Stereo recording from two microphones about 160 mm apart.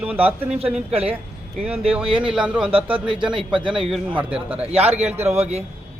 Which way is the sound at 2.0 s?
30° right (ahead or behind).